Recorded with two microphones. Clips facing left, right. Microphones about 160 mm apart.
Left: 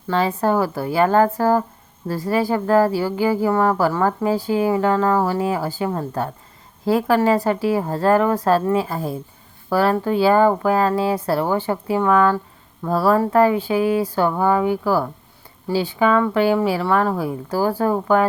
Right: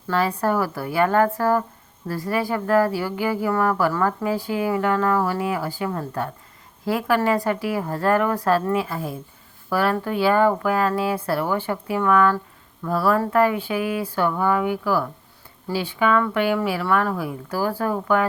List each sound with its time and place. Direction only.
0.1 s speech: 25° left (ahead or behind)